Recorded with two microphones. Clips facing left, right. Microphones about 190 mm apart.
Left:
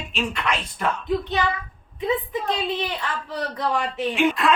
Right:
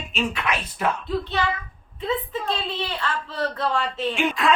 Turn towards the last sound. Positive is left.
turn(degrees=0)  # may be behind; listen again after turning